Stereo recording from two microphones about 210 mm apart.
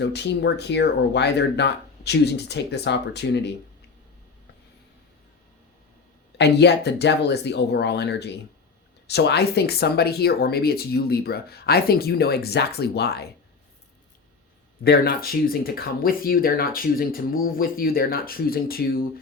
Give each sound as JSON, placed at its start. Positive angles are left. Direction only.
{"t": 0.0, "sound": "speech", "side_deg": 55}
{"t": 6.3, "sound": "speech", "side_deg": 55}
{"t": 14.8, "sound": "speech", "side_deg": 45}